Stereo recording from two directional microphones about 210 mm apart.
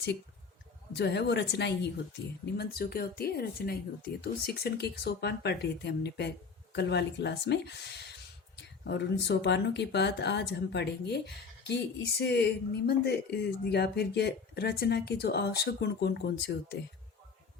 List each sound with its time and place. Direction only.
0.9 s a woman's voice: 50° left (ahead or behind)